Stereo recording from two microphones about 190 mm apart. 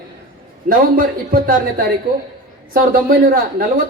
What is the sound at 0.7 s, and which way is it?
Speech, 50° right (ahead or behind).